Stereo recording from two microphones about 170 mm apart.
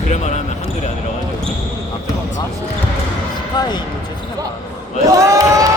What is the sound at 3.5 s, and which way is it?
Speech, 25° left (ahead or behind).